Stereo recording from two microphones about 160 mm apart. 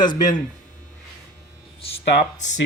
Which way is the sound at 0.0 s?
25° left (ahead or behind).